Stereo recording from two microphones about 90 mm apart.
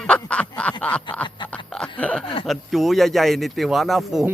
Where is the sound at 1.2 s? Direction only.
60° left (ahead or behind).